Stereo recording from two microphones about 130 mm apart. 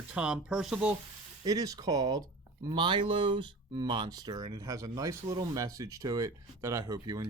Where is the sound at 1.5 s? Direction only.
30° right (ahead or behind).